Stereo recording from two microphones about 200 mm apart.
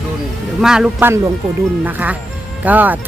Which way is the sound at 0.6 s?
5° right (ahead or behind).